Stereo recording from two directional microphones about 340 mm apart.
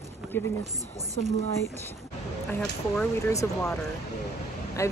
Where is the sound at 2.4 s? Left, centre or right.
Centre.